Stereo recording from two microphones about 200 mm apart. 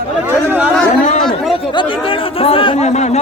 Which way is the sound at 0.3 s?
10° right (ahead or behind).